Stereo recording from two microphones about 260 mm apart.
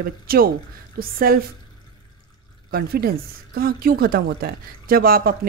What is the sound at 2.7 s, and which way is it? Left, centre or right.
Speech, right.